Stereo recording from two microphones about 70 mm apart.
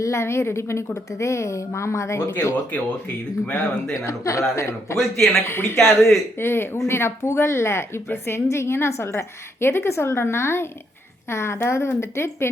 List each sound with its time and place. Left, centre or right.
0.0 s a woman's voice: left
4.0 s a woman's voice: left
4.9 s a man's voice: centre
5.5 s a woman's voice: left
5.7 s a man's voice: centre
6.4 s a woman's voice: left